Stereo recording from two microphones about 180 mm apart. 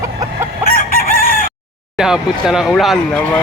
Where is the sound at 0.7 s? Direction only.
55° left (ahead or behind).